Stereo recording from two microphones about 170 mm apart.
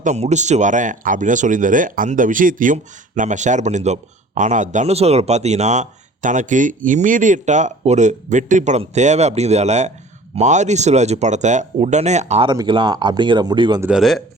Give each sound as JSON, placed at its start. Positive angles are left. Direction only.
{"t": 0.0, "sound": "speech", "side_deg": -45}
{"t": 12.5, "sound": "speech", "side_deg": -25}
{"t": 13.8, "sound": "speech", "side_deg": 0}